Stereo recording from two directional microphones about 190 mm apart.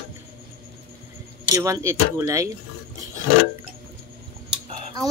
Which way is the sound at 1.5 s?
15° right (ahead or behind).